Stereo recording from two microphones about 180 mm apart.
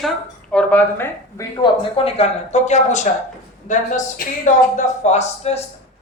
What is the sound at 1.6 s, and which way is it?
Speech, 30° left (ahead or behind).